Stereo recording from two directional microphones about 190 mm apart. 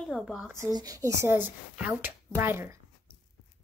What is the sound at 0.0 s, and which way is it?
Speech, centre (ahead or behind).